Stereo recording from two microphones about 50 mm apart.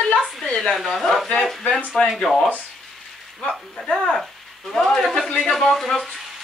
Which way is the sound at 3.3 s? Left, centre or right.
Centre.